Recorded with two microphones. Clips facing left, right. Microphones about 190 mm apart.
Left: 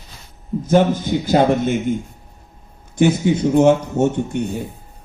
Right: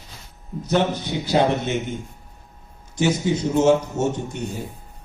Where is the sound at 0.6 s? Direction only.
50° left (ahead or behind).